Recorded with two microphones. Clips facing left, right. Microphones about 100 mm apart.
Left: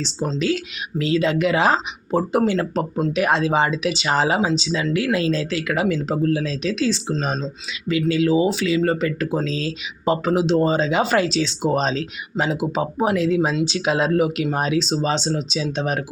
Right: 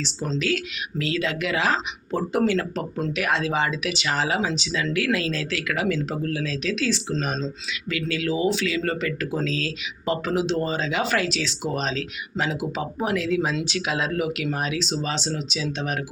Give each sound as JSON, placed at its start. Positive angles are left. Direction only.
{"t": 0.0, "sound": "speech", "side_deg": 20}
{"t": 7.3, "sound": "speech", "side_deg": 15}
{"t": 7.9, "sound": "speech", "side_deg": 25}